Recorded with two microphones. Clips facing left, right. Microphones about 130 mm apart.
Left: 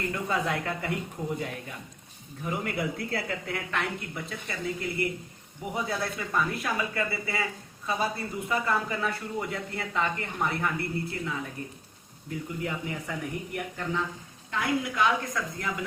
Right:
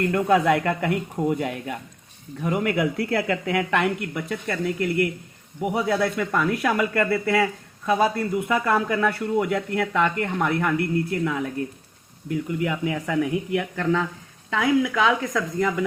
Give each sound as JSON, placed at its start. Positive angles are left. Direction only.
{"t": 0.0, "sound": "a man's voice", "side_deg": -70}
{"t": 12.5, "sound": "a man's voice", "side_deg": -85}
{"t": 14.5, "sound": "a woman's voice", "side_deg": -90}